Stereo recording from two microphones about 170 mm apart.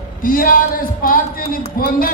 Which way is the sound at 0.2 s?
55° left (ahead or behind).